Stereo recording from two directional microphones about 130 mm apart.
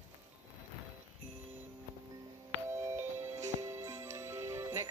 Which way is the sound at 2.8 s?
20° right (ahead or behind).